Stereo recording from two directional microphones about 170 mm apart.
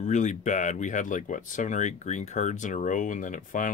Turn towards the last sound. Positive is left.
turn(degrees=50)  # may be behind; listen again after turning